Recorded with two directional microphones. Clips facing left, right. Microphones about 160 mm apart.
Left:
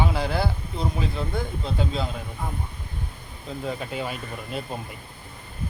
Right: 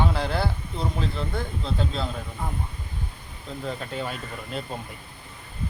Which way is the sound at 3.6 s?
10° left (ahead or behind).